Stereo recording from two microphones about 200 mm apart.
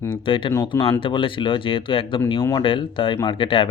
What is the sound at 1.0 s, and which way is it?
Speech, 25° left (ahead or behind).